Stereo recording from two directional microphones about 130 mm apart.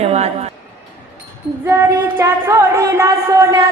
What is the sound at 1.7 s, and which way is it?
Music, 20° right (ahead or behind).